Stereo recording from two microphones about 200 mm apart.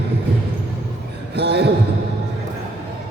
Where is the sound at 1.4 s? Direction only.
55° right (ahead or behind).